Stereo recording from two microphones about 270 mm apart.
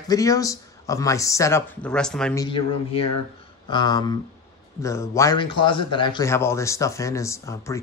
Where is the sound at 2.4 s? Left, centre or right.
Centre.